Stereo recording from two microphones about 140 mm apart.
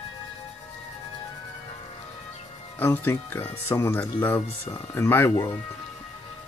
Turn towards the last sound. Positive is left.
turn(degrees=15)  # may be behind; listen again after turning